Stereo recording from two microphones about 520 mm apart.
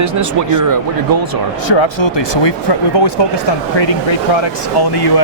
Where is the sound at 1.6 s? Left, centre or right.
Left.